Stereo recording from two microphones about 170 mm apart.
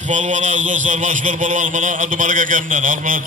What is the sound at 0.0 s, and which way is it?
A man's voice, 45° right (ahead or behind).